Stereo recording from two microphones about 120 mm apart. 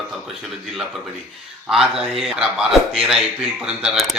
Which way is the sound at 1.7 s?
5° right (ahead or behind).